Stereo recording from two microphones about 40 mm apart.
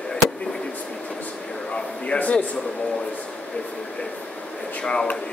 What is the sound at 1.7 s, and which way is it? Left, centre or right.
Speech, left.